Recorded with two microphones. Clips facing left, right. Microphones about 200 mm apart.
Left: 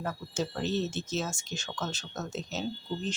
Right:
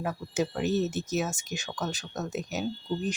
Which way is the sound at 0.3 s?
15° right (ahead or behind).